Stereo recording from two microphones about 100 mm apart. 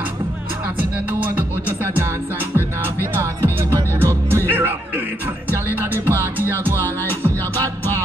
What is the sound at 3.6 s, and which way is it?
Music, 25° right (ahead or behind).